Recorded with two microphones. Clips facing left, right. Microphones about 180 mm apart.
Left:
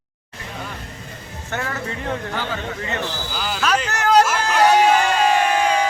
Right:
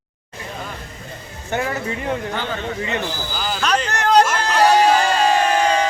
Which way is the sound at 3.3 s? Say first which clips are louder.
Even; centre (ahead or behind).